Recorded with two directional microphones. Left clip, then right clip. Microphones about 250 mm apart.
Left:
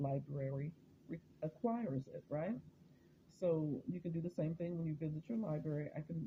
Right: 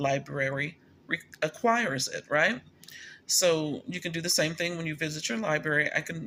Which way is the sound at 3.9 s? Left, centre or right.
Right.